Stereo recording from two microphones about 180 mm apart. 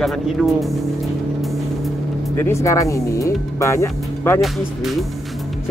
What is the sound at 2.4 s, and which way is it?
Speech, 15° left (ahead or behind).